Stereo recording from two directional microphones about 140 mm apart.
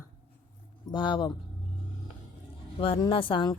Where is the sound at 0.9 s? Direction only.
35° left (ahead or behind).